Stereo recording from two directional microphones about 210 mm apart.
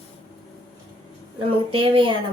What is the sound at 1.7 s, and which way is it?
Speech, 25° right (ahead or behind).